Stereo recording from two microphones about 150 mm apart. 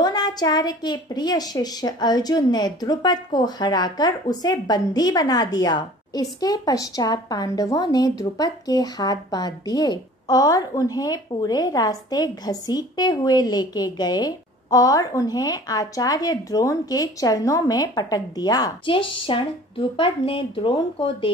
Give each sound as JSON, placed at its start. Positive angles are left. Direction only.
{"t": 0.0, "sound": "a woman's voice", "side_deg": 25}